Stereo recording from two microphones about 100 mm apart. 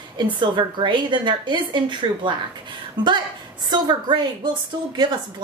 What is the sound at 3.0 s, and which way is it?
A woman's voice, 50° right (ahead or behind).